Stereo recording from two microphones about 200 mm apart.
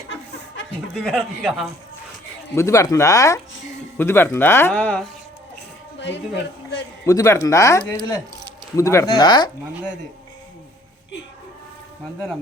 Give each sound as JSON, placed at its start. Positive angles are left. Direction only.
{"t": 0.9, "sound": "speech", "side_deg": 0}
{"t": 2.6, "sound": "speech", "side_deg": 15}
{"t": 6.0, "sound": "speech", "side_deg": 60}
{"t": 7.0, "sound": "speech", "side_deg": 15}